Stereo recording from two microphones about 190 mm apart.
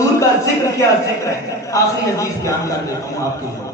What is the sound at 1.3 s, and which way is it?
A man's voice, 15° left (ahead or behind).